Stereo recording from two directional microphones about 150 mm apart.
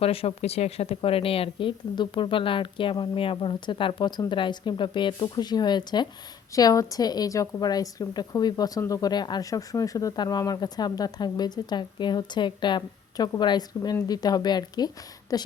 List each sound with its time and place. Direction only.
0.0 s a woman's voice: 40° left (ahead or behind); by 15.4 s 25° left (ahead or behind)